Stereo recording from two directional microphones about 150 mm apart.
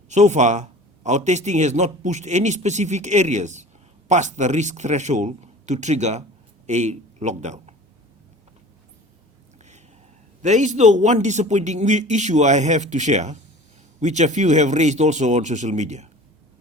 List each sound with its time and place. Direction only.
0.1 s a man's voice: 50° right (ahead or behind)
10.4 s a man's voice: 50° right (ahead or behind)